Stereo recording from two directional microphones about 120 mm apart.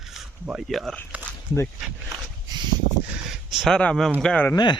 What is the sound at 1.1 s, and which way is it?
Walk, 10° right (ahead or behind).